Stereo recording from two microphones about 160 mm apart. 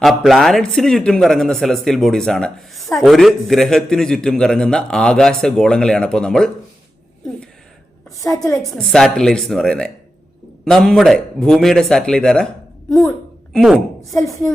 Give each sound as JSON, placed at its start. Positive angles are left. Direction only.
{"t": 0.0, "sound": "a man's voice", "side_deg": 0}
{"t": 8.2, "sound": "a woman's voice", "side_deg": 20}
{"t": 8.7, "sound": "a man's voice", "side_deg": 5}
{"t": 13.5, "sound": "speech", "side_deg": 0}